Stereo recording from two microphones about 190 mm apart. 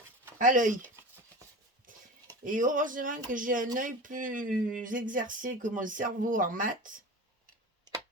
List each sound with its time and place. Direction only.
0.3 s speech: 45° right (ahead or behind)
1.9 s a sound: 45° right (ahead or behind)
2.4 s speech: 45° right (ahead or behind)